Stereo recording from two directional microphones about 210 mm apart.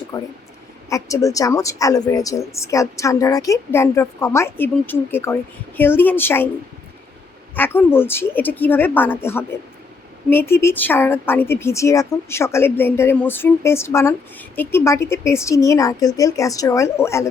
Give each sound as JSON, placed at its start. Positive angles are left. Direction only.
{"t": 0.1, "sound": "a woman's voice", "side_deg": 15}
{"t": 7.5, "sound": "a woman's voice", "side_deg": 10}